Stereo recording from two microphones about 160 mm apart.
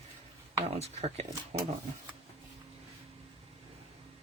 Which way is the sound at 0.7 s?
40° right (ahead or behind).